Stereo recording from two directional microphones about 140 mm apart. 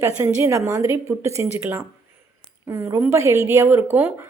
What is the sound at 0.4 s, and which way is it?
Speech, 20° right (ahead or behind).